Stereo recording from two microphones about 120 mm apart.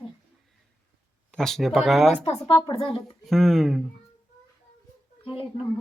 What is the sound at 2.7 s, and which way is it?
Speech, 50° left (ahead or behind).